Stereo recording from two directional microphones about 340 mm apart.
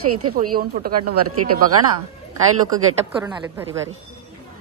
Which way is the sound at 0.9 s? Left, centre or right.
Right.